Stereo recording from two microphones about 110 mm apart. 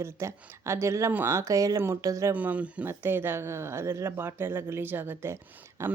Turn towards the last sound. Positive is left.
turn(degrees=-25)  # may be behind; listen again after turning